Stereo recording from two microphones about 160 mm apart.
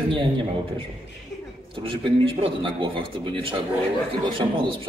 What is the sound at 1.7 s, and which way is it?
A man's voice, 30° right (ahead or behind).